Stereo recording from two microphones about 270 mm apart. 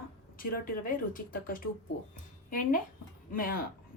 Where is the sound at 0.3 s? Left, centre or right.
Left.